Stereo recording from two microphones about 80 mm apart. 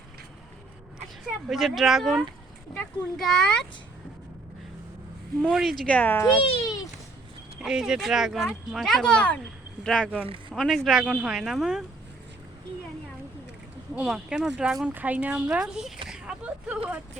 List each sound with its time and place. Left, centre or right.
1.5 s a child's voice: centre
5.4 s speech: centre
5.8 s speech: centre
7.6 s a child's voice: centre
10.5 s speech: centre
13.9 s speech: centre
14.9 s speech: centre
16.0 s a sound: centre